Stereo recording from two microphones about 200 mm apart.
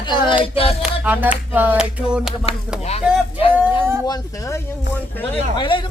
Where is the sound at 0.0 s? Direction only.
20° left (ahead or behind).